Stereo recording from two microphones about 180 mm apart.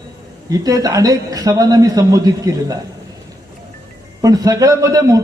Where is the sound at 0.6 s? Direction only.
20° right (ahead or behind).